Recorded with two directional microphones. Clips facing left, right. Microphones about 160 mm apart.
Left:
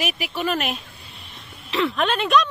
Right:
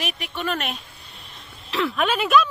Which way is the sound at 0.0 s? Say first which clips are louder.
Left 3 dB; 5° left (ahead or behind).